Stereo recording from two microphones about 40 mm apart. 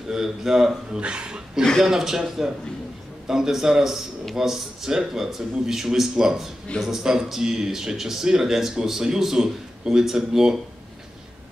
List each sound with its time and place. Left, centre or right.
0.1 s speech: centre
1.8 s speech: centre